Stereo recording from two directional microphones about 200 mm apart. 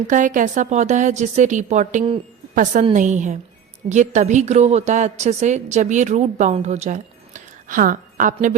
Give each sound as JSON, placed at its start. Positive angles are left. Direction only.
{"t": 0.1, "sound": "a woman's voice", "side_deg": -40}